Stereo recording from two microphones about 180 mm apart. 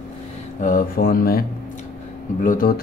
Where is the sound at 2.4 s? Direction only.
50° left (ahead or behind).